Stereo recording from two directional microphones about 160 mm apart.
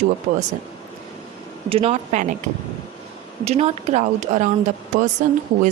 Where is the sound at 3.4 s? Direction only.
40° right (ahead or behind).